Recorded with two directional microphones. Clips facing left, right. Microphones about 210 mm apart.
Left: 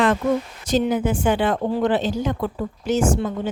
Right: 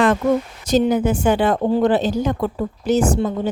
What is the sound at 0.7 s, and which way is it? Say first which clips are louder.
A woman's voice: right 3 dB; 40° right (ahead or behind).